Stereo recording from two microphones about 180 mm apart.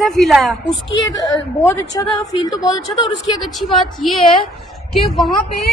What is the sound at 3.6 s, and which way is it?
Speech, 25° left (ahead or behind).